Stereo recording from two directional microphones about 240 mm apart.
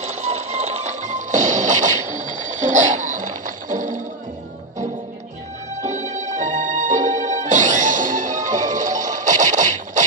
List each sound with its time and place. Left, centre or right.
0.0 s music: right
5.8 s music: right